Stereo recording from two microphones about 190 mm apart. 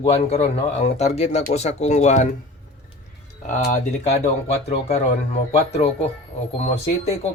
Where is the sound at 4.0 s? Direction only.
35° left (ahead or behind).